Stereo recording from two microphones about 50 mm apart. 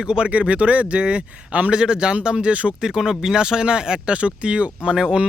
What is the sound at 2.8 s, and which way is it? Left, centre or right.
Speech, centre.